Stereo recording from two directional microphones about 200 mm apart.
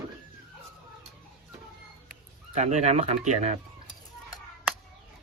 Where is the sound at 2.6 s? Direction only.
35° right (ahead or behind).